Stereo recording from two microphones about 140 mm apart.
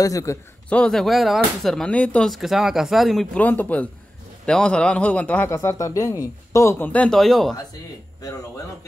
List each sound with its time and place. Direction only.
0.0 s speech: 25° left (ahead or behind)
0.7 s speech: 5° left (ahead or behind)
3.3 s a man's voice: 10° left (ahead or behind)
8.2 s speech: 20° left (ahead or behind)